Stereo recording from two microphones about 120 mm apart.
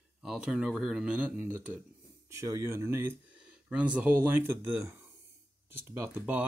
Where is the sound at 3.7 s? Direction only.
10° right (ahead or behind).